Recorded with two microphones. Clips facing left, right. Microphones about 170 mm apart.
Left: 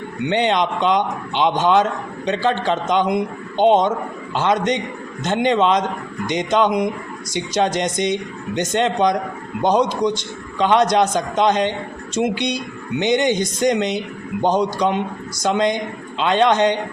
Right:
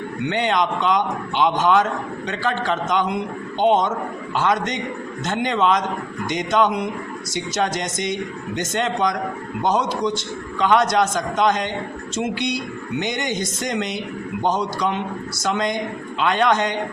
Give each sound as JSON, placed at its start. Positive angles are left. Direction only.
{"t": 0.3, "sound": "a man's voice", "side_deg": 20}